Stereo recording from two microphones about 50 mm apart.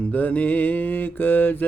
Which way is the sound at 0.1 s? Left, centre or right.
Left.